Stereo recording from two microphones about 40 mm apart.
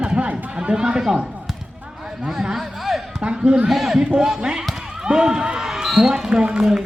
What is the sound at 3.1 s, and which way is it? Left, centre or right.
Speech, right.